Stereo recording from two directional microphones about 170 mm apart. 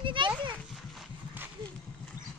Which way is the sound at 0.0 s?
30° right (ahead or behind).